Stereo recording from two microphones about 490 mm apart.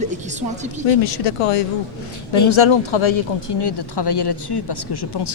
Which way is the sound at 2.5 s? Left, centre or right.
Left.